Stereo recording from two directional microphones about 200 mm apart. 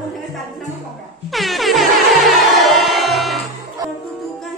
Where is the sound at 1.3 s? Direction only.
Centre (ahead or behind).